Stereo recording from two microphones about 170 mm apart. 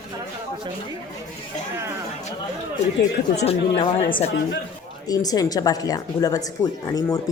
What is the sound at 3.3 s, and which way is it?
Speech, 40° left (ahead or behind).